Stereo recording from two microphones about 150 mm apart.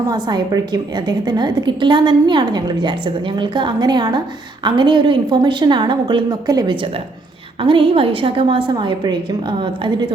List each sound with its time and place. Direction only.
0.1 s a woman's voice: 25° right (ahead or behind)